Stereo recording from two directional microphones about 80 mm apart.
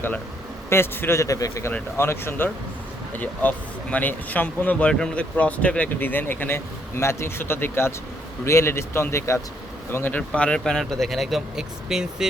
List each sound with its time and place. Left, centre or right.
0.7 s speech: left
2.0 s speech: left
3.2 s speech: centre
10.2 s speech: centre